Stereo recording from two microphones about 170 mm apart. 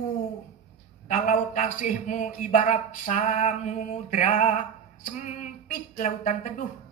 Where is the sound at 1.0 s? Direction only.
45° left (ahead or behind).